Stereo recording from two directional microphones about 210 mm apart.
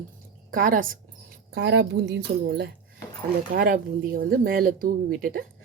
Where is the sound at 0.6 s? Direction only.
40° right (ahead or behind).